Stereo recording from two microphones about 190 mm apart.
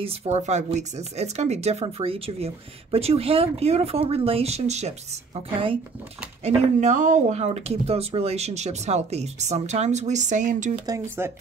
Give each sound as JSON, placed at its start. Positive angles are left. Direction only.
{"t": 0.0, "sound": "speech", "side_deg": -35}
{"t": 10.9, "sound": "speech", "side_deg": -15}